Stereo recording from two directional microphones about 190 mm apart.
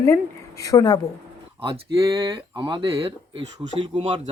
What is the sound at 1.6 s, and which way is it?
Speech, 20° right (ahead or behind).